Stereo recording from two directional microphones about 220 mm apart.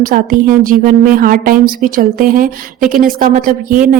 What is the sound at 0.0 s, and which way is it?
A woman's voice, 40° right (ahead or behind).